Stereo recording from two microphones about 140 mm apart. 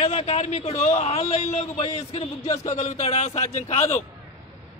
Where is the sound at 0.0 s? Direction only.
45° left (ahead or behind).